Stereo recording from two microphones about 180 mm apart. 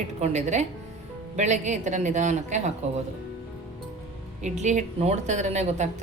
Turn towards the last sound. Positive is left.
turn(degrees=-40)  # may be behind; listen again after turning